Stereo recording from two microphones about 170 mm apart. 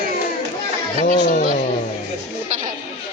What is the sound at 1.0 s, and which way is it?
Speech, 45° left (ahead or behind).